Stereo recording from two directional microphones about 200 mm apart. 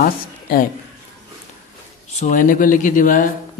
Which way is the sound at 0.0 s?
45° left (ahead or behind).